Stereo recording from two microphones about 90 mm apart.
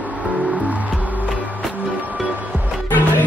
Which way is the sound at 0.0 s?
15° right (ahead or behind).